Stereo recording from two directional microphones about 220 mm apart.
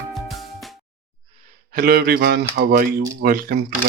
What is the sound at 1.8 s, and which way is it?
Speech, 45° right (ahead or behind).